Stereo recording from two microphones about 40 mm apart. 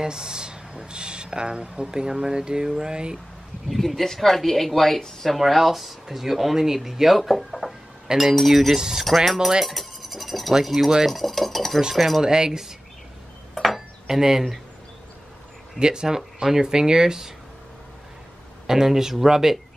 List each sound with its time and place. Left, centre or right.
0.0 s speech: centre
3.6 s speech: centre
9.0 s speech: centre
9.7 s a sound: centre
11.1 s speech: centre
12.2 s speech: centre
13.6 s cutlery: centre
14.0 s speech: centre
15.8 s speech: centre
18.7 s speech: centre